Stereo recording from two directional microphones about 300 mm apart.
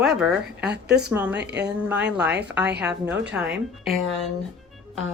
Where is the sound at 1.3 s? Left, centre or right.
Right.